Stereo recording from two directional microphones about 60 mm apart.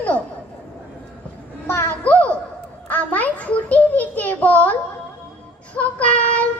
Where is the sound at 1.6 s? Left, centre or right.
Left.